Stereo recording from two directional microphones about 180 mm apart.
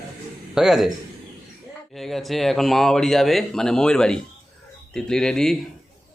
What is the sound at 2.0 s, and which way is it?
Speech, centre (ahead or behind).